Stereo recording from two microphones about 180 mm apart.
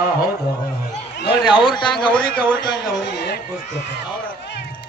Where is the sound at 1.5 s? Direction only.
25° left (ahead or behind).